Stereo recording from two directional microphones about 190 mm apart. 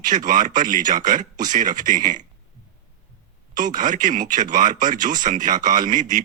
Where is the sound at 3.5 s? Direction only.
45° right (ahead or behind).